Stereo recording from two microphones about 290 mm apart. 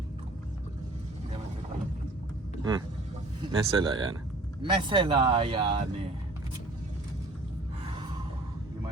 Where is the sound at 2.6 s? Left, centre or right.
Centre.